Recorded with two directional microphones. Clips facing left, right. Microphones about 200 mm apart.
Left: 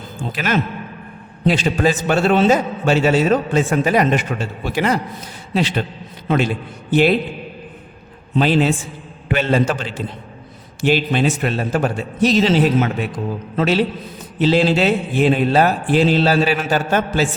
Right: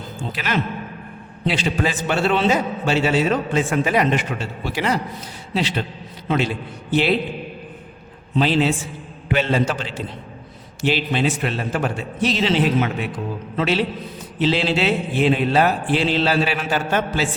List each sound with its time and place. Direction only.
0.3 s a man's voice: 45° left (ahead or behind)
6.2 s a man's voice: 50° left (ahead or behind)
8.4 s a man's voice: 50° left (ahead or behind)